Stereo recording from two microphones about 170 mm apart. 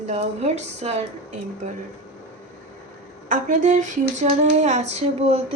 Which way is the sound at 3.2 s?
50° right (ahead or behind).